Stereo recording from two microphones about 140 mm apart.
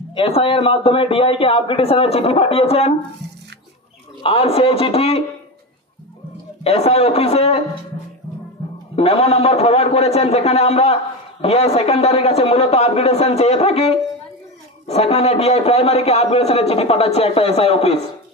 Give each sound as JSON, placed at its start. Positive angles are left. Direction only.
{"t": 0.1, "sound": "a man's voice", "side_deg": 40}
{"t": 4.2, "sound": "a man's voice", "side_deg": 45}
{"t": 6.6, "sound": "a man's voice", "side_deg": 45}
{"t": 8.9, "sound": "a man's voice", "side_deg": 45}